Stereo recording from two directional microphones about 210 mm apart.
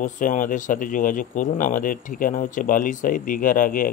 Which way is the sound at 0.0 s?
35° left (ahead or behind).